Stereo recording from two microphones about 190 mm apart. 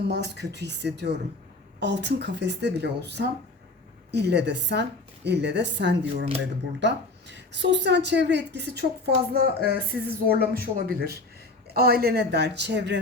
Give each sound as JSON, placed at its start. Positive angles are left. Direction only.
{"t": 0.1, "sound": "a woman's voice", "side_deg": -60}